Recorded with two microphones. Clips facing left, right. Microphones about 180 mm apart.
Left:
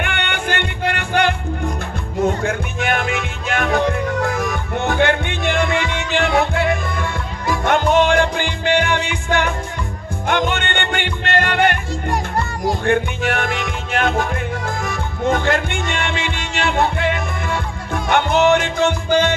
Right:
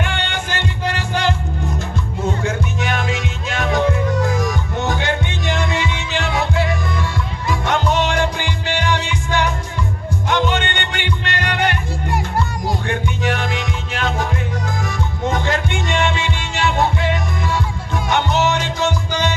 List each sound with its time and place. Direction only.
0.0 s music: 60° left (ahead or behind)
12.8 s music: 50° left (ahead or behind)